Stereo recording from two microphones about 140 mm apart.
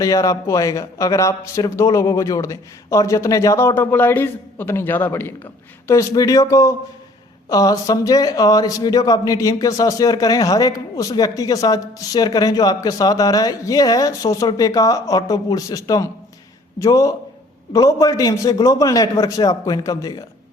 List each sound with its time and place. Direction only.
0.0 s speech: 25° left (ahead or behind)